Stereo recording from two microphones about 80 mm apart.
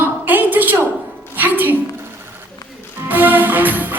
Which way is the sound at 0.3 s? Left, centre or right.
Right.